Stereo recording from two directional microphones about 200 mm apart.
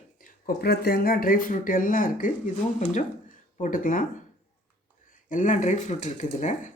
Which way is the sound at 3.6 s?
40° left (ahead or behind).